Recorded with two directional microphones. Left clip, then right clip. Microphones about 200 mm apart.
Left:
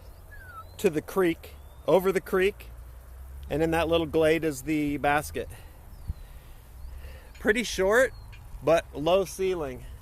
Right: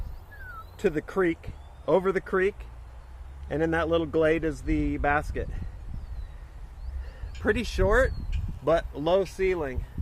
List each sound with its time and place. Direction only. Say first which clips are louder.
0.8 s speech: left 1 dB; 15° left (ahead or behind)
7.4 s speech: left 1 dB; 10° left (ahead or behind); by 9.6 s 5° right (ahead or behind)